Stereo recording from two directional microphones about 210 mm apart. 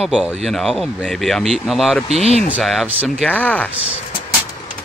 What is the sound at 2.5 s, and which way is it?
Speech, 5° right (ahead or behind).